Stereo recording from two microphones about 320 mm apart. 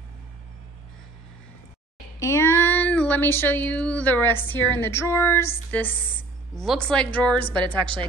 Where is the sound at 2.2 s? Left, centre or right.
Centre.